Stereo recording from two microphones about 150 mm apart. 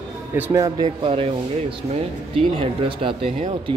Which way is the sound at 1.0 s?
40° right (ahead or behind).